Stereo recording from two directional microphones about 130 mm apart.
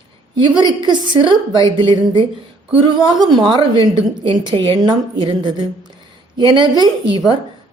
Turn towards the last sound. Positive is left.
turn(degrees=-35)  # may be behind; listen again after turning